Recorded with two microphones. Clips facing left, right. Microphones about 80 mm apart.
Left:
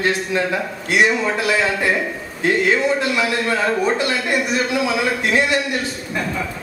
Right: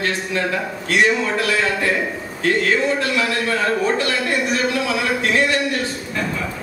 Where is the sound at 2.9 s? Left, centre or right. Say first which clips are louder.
Left 1 dB; centre.